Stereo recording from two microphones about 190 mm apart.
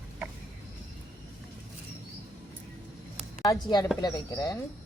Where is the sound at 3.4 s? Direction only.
20° left (ahead or behind).